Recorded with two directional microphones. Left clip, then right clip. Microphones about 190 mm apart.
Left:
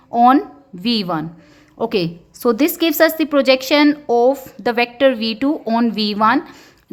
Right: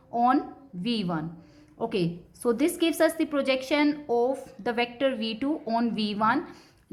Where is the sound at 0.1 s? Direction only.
35° left (ahead or behind).